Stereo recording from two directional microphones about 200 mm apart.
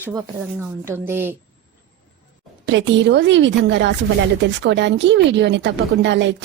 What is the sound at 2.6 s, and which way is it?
Speech, 65° right (ahead or behind).